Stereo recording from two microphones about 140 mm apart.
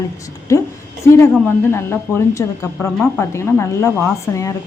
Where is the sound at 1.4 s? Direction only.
15° left (ahead or behind).